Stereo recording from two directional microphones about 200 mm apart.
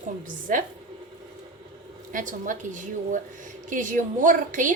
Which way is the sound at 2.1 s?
40° right (ahead or behind).